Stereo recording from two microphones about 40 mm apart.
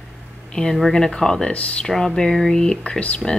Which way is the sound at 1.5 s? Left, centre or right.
Left.